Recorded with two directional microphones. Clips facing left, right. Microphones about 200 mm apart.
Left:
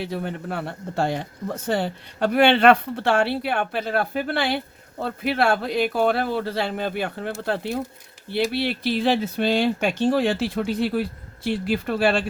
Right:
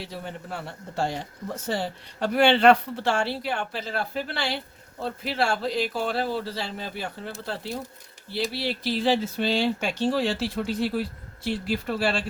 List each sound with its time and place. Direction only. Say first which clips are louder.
0.0 s speech: left 7 dB; 60° left (ahead or behind)